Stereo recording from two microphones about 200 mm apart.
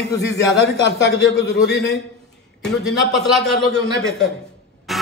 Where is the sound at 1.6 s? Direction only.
60° left (ahead or behind).